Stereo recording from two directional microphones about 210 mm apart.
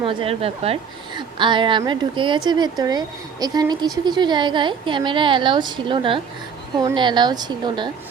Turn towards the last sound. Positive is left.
turn(degrees=-20)  # may be behind; listen again after turning